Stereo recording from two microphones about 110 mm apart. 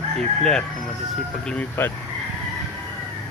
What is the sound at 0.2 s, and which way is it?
Speech, 5° left (ahead or behind).